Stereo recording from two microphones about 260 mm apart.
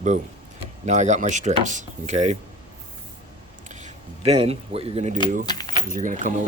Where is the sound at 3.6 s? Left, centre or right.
Right.